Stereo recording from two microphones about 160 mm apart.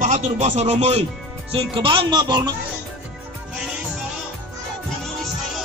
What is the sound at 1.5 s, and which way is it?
Speech, 35° right (ahead or behind).